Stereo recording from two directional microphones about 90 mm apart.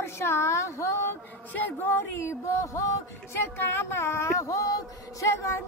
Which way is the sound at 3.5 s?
30° left (ahead or behind).